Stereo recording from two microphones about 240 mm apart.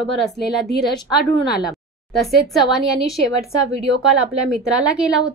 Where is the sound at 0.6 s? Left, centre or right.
Left.